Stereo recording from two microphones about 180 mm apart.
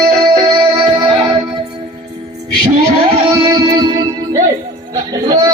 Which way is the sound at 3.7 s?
20° right (ahead or behind).